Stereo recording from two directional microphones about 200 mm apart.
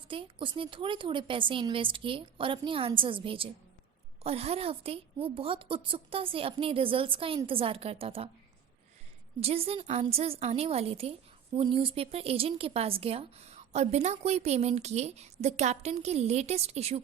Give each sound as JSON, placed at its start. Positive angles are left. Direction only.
{"t": 0.1, "sound": "a woman's voice", "side_deg": -25}
{"t": 9.4, "sound": "a woman's voice", "side_deg": -30}